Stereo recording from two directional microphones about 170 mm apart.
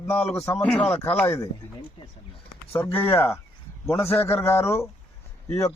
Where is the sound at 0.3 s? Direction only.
15° left (ahead or behind).